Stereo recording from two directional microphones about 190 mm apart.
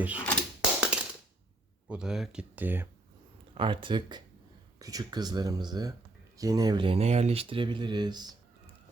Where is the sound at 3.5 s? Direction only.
25° right (ahead or behind).